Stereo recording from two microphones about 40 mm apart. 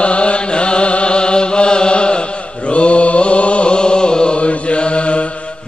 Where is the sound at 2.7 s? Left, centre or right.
Left.